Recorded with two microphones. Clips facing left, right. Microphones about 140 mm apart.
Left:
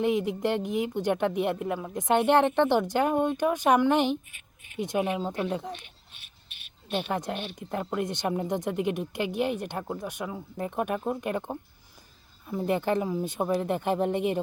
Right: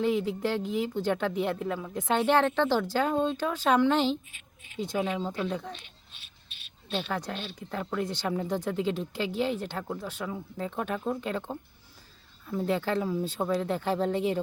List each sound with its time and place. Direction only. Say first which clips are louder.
0.0 s speech: left 1 dB; 15° left (ahead or behind)
6.9 s speech: left 3 dB; 20° left (ahead or behind)